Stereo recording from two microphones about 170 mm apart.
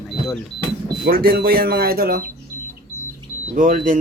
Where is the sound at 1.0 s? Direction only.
65° right (ahead or behind).